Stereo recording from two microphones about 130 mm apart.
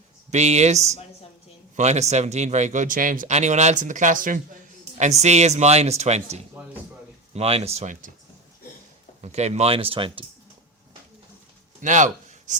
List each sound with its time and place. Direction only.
0.3 s speech: 60° right (ahead or behind); by 4.4 s 90° right
4.9 s speech: 60° right (ahead or behind)
9.2 s speech: 60° right (ahead or behind); by 10.2 s 45° right (ahead or behind)
11.8 s a sound: 70° right (ahead or behind)